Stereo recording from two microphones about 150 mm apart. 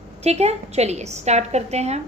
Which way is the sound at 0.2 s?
45° right (ahead or behind).